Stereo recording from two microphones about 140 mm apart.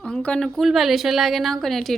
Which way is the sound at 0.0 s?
5° left (ahead or behind).